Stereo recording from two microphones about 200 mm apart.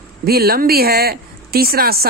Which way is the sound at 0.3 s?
50° right (ahead or behind).